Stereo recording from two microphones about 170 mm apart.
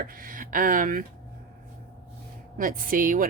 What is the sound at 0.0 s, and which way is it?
Speech, 55° right (ahead or behind).